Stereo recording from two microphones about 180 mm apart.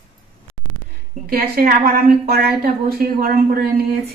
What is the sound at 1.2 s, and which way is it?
A woman's voice, 55° right (ahead or behind).